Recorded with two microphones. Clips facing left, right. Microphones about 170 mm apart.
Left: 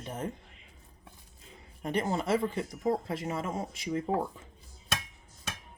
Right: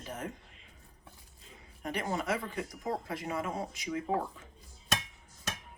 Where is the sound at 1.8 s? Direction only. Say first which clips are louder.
Left 4 dB; 30° left (ahead or behind).